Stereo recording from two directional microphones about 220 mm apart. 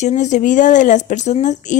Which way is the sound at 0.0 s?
30° left (ahead or behind).